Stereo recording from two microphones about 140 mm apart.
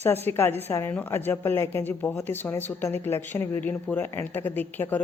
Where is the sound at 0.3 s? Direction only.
15° left (ahead or behind).